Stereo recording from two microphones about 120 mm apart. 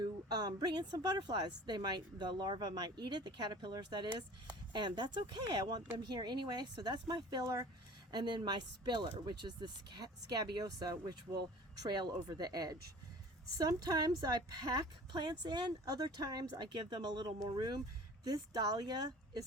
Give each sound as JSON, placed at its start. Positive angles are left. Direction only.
{"t": 0.0, "sound": "speech", "side_deg": -35}